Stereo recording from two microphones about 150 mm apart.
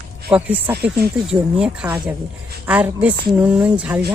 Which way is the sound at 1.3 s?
5° right (ahead or behind).